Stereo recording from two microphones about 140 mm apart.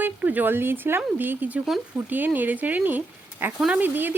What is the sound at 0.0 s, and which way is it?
Speech, 10° right (ahead or behind).